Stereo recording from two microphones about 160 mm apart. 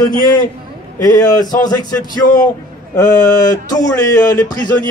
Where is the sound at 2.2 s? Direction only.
55° left (ahead or behind).